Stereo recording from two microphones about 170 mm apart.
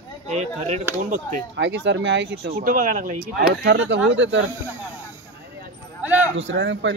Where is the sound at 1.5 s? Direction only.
90° right.